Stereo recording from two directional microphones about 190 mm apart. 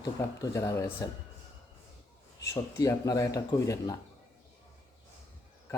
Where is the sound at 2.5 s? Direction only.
15° left (ahead or behind).